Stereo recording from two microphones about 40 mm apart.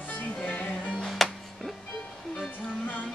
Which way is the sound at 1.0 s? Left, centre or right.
Centre.